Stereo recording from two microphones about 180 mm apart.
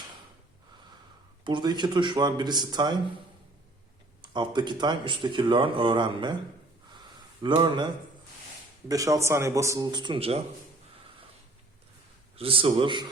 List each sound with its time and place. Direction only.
1.5 s speech: 25° right (ahead or behind)
4.2 s speech: 25° right (ahead or behind)
7.4 s speech: 25° right (ahead or behind)
8.9 s speech: 20° right (ahead or behind)
12.4 s speech: 30° right (ahead or behind)